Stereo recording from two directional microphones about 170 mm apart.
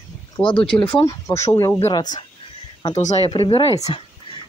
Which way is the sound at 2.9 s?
40° left (ahead or behind).